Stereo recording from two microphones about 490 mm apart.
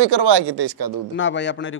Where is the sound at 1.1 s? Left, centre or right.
Left.